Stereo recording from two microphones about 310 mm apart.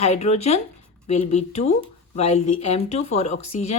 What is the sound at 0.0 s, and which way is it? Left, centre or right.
A woman's voice, left.